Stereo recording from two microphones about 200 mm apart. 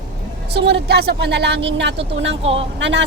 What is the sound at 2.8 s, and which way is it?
Speech, 60° right (ahead or behind).